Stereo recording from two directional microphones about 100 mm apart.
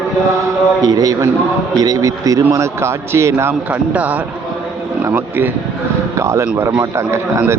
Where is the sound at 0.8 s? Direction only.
40° right (ahead or behind).